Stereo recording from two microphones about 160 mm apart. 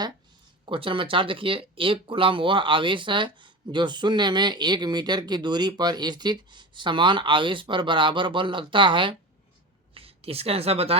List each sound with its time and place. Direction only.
0.6 s speech: 35° right (ahead or behind)